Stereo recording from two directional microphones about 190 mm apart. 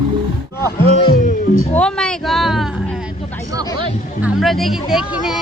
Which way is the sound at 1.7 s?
5° left (ahead or behind).